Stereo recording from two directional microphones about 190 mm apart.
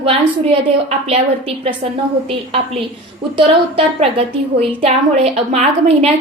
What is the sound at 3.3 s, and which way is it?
A woman's voice, 30° right (ahead or behind).